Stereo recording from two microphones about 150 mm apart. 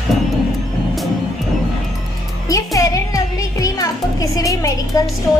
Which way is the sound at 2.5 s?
20° left (ahead or behind).